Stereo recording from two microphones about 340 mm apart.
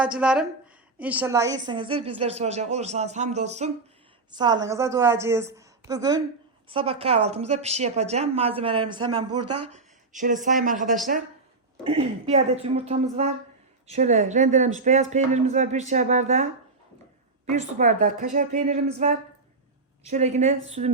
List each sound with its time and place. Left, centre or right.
0.0 s a woman's voice: centre
9.3 s speech: right
9.6 s a woman's voice: right
17.5 s speech: right